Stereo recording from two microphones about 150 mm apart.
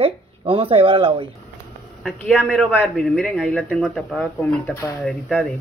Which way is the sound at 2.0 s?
Centre (ahead or behind).